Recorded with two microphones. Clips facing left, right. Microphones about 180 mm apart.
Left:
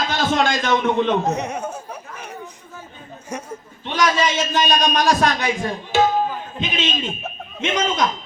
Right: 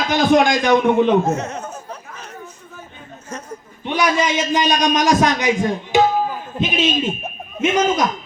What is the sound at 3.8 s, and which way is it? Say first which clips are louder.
A man's voice: right 1 dB; 15° right (ahead or behind).